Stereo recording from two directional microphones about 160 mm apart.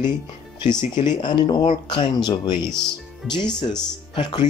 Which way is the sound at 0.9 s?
30° left (ahead or behind).